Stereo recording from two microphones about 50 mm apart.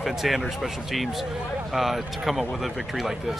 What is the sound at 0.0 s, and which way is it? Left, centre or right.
Speech, centre.